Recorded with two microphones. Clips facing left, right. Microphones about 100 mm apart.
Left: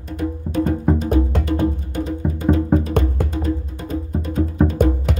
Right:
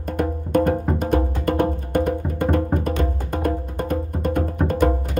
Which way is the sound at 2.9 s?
55° left (ahead or behind).